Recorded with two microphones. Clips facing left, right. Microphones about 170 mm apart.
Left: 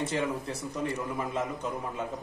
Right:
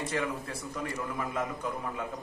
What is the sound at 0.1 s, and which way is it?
A man's voice, 25° left (ahead or behind).